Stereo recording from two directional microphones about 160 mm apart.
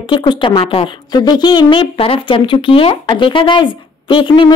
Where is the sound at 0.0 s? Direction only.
30° left (ahead or behind).